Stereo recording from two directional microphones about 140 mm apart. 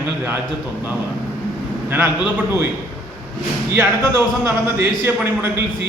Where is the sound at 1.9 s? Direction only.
15° right (ahead or behind).